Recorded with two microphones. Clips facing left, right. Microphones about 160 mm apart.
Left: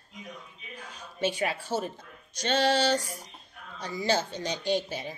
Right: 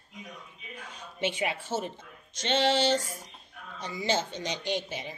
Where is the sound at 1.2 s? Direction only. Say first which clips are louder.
Left 2 dB; 20° right (ahead or behind).